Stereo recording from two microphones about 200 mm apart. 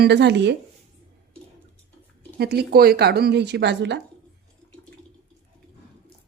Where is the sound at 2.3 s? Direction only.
55° right (ahead or behind).